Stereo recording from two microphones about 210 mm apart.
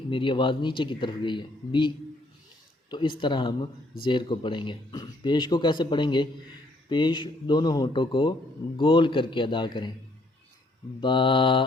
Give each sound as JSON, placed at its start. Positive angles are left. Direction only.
{"t": 0.1, "sound": "speech", "side_deg": 25}
{"t": 2.9, "sound": "speech", "side_deg": 20}
{"t": 11.0, "sound": "speech", "side_deg": 25}